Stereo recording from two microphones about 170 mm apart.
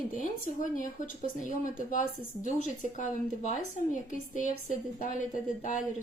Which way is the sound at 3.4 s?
50° left (ahead or behind).